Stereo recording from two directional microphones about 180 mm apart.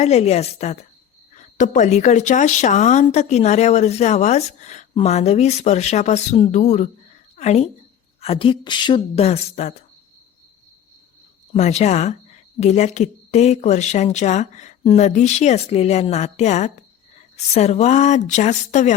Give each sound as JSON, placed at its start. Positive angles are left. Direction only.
{"t": 0.0, "sound": "a woman's voice", "side_deg": 35}
{"t": 11.5, "sound": "a woman's voice", "side_deg": 40}